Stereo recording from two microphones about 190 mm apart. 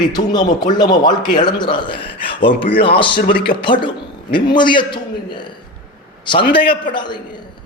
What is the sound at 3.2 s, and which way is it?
Speech, 50° left (ahead or behind).